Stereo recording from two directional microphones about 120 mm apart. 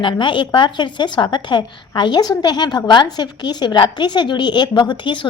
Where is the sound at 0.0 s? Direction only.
40° left (ahead or behind).